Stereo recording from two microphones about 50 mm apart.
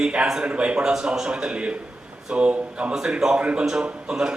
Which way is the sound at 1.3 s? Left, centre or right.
Right.